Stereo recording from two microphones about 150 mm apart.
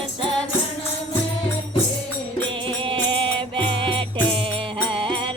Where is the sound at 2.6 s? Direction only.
35° right (ahead or behind).